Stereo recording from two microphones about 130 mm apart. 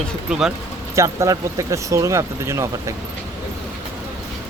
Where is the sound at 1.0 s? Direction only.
25° right (ahead or behind).